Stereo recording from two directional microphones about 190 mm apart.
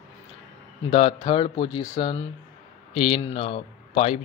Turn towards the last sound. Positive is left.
turn(degrees=30)  # may be behind; listen again after turning